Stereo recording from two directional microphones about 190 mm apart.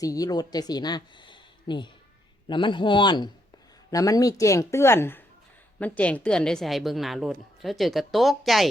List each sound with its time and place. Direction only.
0.0 s a woman's voice: 20° left (ahead or behind); by 8.7 s centre (ahead or behind)